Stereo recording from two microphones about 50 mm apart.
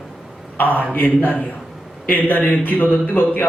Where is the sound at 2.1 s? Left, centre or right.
Left.